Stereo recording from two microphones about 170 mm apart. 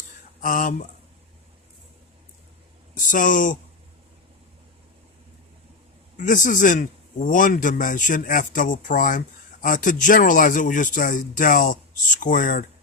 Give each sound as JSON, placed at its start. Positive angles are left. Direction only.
{"t": 0.4, "sound": "speech", "side_deg": 50}
{"t": 2.9, "sound": "speech", "side_deg": 50}
{"t": 6.2, "sound": "speech", "side_deg": 50}